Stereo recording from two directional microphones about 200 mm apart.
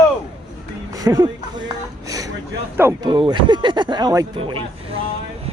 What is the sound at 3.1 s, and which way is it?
Speech, 25° right (ahead or behind).